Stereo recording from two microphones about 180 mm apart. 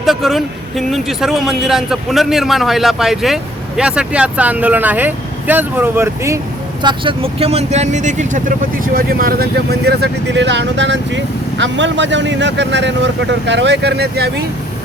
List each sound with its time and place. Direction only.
0.0 s speech: centre (ahead or behind)
6.8 s speech: 30° right (ahead or behind); by 14.4 s 65° right (ahead or behind)